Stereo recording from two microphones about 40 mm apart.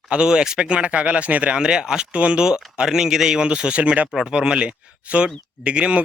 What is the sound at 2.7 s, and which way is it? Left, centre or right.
Speech, centre.